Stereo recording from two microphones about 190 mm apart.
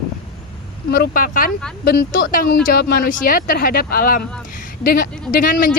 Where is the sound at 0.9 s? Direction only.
50° left (ahead or behind).